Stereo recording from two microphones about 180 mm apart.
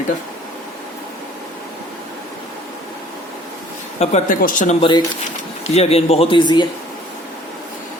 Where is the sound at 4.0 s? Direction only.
45° left (ahead or behind); by 6.6 s 25° left (ahead or behind).